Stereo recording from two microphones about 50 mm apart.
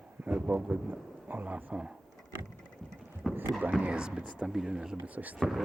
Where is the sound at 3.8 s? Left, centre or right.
Centre.